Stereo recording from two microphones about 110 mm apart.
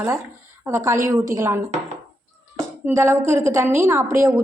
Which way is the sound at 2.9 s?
25° right (ahead or behind).